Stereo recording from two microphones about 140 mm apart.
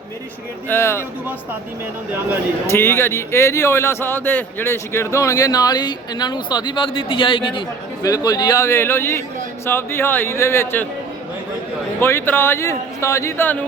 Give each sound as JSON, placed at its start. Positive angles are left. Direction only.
{"t": 0.7, "sound": "speech", "side_deg": 15}
{"t": 2.6, "sound": "a man's voice", "side_deg": 15}
{"t": 8.0, "sound": "a man's voice", "side_deg": 25}
{"t": 11.9, "sound": "speech", "side_deg": 15}